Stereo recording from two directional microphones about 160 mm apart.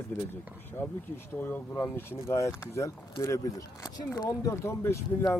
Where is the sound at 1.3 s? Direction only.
10° left (ahead or behind).